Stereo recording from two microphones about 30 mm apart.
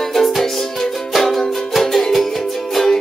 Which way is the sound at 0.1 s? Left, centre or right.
Centre.